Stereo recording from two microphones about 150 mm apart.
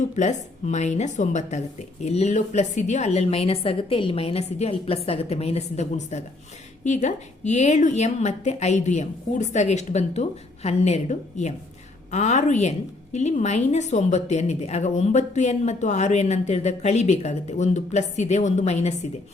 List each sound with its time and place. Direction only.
0.2 s a woman's voice: 50° left (ahead or behind)